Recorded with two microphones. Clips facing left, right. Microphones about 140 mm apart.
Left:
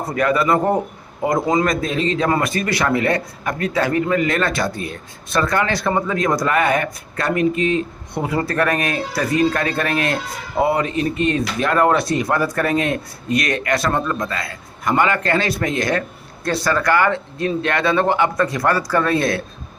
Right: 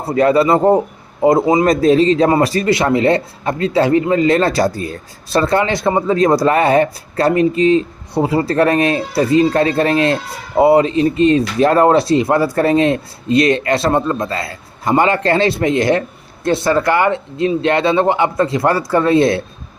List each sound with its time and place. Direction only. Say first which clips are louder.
0.0 s speech: right 6 dB; 30° right (ahead or behind)